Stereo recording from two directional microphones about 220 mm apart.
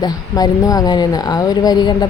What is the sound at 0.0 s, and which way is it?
Speech, 15° left (ahead or behind).